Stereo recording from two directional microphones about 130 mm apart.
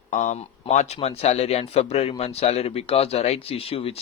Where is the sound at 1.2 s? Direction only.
55° left (ahead or behind).